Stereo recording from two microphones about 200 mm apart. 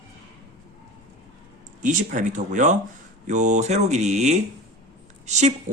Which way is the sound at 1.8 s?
40° right (ahead or behind).